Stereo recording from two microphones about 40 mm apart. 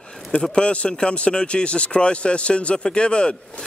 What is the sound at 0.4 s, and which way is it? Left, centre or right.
Speech, left.